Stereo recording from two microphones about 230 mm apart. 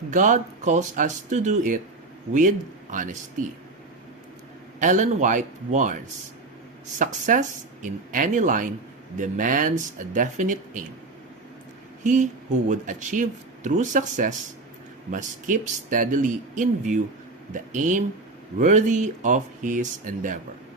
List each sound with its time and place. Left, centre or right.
0.1 s speech: right
2.9 s speech: right
4.8 s speech: right
7.0 s speech: right
12.0 s speech: right